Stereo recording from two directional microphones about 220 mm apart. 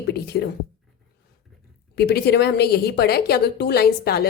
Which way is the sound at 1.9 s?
45° left (ahead or behind).